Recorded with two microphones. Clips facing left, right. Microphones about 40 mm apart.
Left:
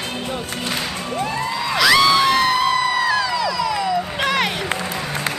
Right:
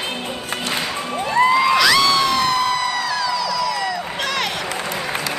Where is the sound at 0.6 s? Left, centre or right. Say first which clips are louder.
Right 3 dB; right.